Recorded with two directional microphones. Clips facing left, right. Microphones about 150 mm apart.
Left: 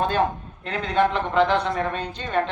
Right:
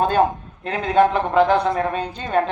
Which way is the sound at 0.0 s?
40° right (ahead or behind).